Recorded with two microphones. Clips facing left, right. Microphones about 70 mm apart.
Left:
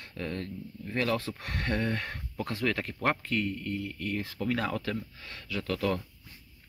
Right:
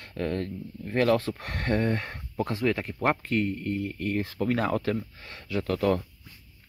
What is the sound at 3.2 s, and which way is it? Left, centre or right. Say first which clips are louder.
Speech: right 4 dB; right.